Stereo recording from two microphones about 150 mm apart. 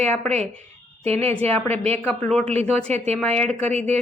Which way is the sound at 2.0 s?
10° left (ahead or behind).